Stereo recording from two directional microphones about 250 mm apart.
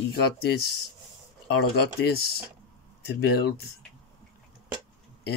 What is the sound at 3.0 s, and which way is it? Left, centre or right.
Speech, left.